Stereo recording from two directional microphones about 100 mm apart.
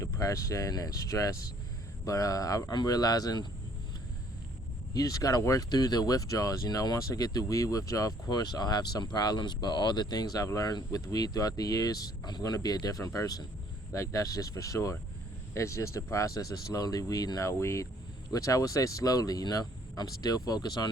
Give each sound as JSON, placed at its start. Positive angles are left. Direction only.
{"t": 0.0, "sound": "speech", "side_deg": 35}
{"t": 4.9, "sound": "speech", "side_deg": 35}